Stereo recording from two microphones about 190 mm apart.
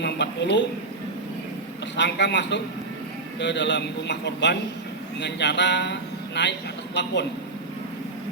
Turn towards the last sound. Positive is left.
turn(degrees=65)  # may be behind; listen again after turning